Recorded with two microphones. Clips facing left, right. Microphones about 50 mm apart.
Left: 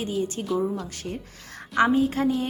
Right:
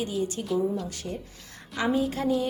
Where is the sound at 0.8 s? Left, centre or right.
Left.